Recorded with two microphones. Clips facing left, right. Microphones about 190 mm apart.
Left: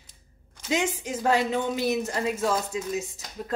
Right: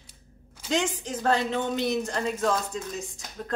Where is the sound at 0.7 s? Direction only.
10° left (ahead or behind).